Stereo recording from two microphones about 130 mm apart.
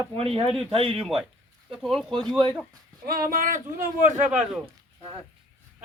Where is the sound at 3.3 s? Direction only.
90° right; by 4.3 s 70° right (ahead or behind).